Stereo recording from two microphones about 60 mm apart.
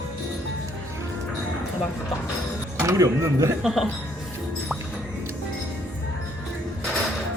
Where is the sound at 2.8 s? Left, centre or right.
Right.